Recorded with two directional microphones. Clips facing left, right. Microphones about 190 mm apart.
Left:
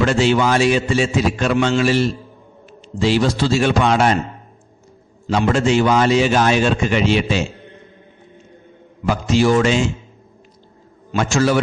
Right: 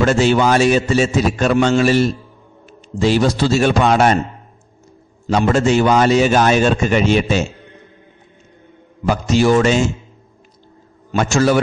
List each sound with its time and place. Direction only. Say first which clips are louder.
0.0 s a man's voice: right 2 dB; 45° right (ahead or behind)
5.2 s a man's voice: right 2 dB; 45° right (ahead or behind)
9.0 s a man's voice: right 1 dB; 40° right (ahead or behind)
11.1 s a man's voice: right 2 dB; 45° right (ahead or behind)